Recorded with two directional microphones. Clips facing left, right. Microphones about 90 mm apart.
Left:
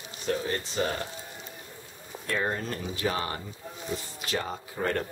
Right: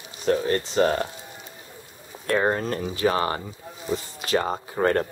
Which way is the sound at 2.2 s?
55° right (ahead or behind).